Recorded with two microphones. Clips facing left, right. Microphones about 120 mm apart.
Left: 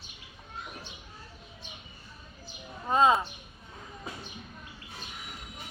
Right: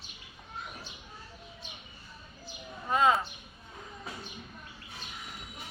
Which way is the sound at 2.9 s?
25° left (ahead or behind).